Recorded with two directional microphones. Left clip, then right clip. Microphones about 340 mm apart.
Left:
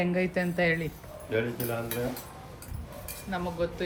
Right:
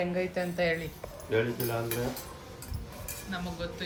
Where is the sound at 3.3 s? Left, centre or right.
Centre.